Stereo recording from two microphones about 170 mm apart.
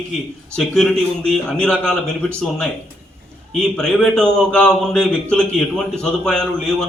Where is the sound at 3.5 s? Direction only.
5° left (ahead or behind).